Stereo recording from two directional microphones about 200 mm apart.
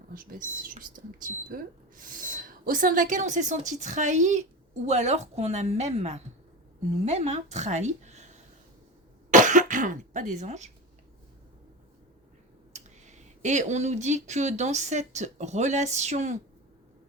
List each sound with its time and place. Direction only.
0.1 s speech: 45° right (ahead or behind)
9.3 s cough: 40° right (ahead or behind)
12.7 s speech: 35° right (ahead or behind)